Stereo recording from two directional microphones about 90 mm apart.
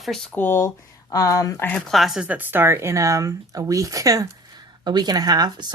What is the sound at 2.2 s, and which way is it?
Speech, 20° right (ahead or behind).